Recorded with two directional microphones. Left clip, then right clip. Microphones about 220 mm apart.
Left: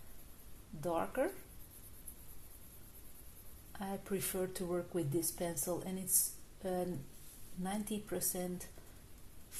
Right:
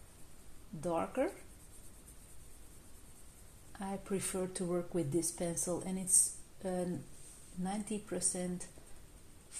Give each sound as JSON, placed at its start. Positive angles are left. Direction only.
{"t": 0.8, "sound": "speech", "side_deg": -20}
{"t": 3.8, "sound": "speech", "side_deg": -20}